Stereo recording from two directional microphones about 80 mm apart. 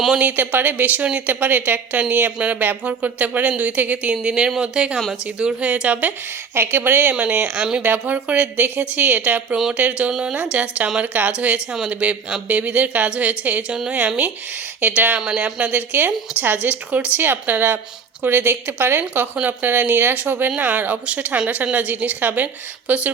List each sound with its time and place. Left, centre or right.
0.2 s a woman's voice: right
15.2 s a woman's voice: centre